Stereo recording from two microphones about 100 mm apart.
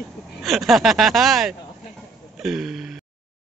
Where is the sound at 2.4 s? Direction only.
5° right (ahead or behind).